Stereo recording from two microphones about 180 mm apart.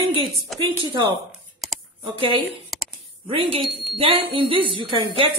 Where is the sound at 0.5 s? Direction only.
Centre (ahead or behind).